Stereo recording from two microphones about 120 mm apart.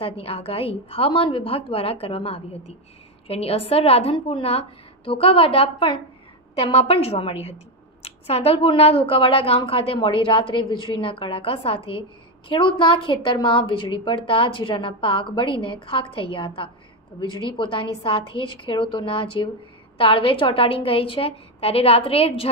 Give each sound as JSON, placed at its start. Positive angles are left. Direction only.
{"t": 0.0, "sound": "a woman's voice", "side_deg": 55}